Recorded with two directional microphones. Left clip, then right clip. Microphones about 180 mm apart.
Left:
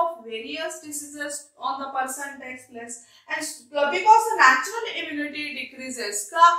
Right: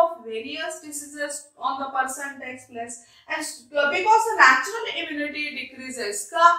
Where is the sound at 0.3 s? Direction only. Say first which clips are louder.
Right 1 dB; 20° left (ahead or behind).